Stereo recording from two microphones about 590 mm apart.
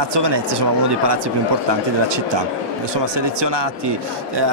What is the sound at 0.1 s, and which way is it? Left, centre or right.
Speech, right.